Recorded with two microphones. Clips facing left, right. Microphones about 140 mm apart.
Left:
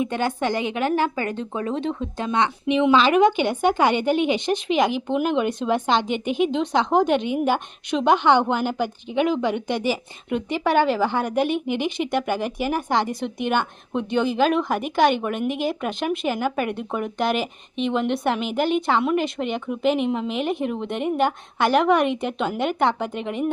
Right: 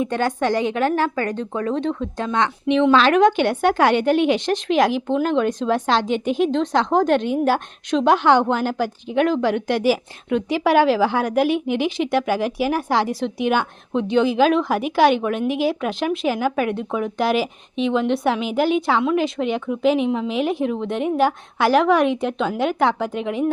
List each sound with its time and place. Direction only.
1.0 s speech: 25° left (ahead or behind)
2.6 s speech: 5° left (ahead or behind)